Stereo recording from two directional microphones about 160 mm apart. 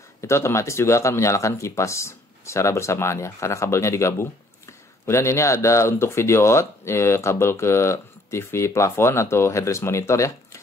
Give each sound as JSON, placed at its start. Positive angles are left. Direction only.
{"t": 0.2, "sound": "speech", "side_deg": 15}